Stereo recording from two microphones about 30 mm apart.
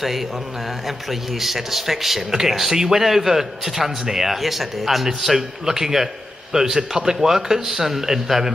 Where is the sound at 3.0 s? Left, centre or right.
Centre.